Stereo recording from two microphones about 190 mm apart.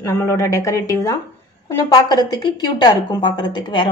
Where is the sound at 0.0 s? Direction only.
15° left (ahead or behind).